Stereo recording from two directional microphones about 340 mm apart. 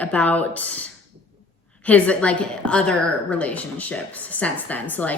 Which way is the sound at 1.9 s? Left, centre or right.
Centre.